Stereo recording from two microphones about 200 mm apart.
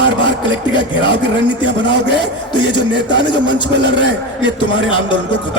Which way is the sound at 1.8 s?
60° right (ahead or behind).